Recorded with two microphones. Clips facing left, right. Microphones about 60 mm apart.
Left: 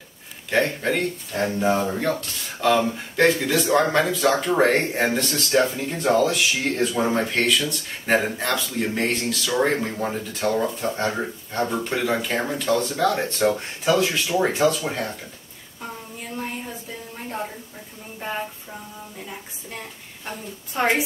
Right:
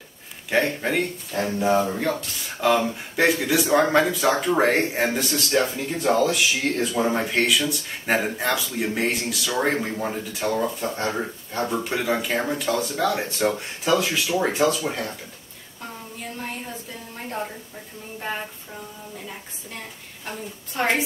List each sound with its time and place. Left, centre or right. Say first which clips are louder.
0.5 s speech: left 1 dB; centre
2.1 s speech: even; centre
14.8 s speech: even; centre
20.2 s speech: even; centre